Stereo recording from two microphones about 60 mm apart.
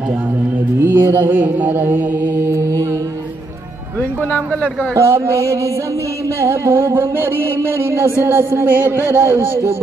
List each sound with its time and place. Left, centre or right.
0.7 s mantra: right
4.9 s music: right
8.6 s speech: right